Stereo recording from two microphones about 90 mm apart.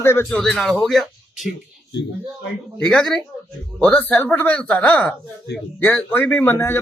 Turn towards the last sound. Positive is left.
turn(degrees=25)  # may be behind; listen again after turning